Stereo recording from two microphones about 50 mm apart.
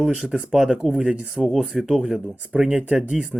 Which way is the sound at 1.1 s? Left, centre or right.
Centre.